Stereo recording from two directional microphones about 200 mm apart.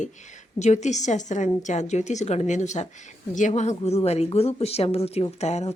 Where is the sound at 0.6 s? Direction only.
35° left (ahead or behind).